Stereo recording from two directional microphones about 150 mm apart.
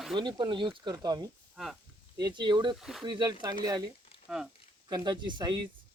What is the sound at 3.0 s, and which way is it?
Speech, 30° right (ahead or behind).